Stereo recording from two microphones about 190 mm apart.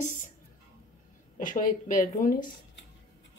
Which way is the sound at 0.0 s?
40° left (ahead or behind).